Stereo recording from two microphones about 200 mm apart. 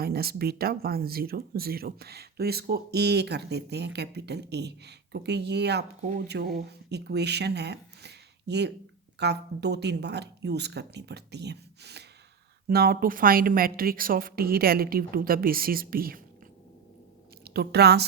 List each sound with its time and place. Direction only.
0.0 s a woman's voice: 50° right (ahead or behind)
17.4 s speech: 50° right (ahead or behind)